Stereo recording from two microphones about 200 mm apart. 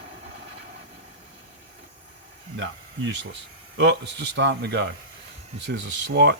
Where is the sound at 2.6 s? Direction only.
65° right (ahead or behind).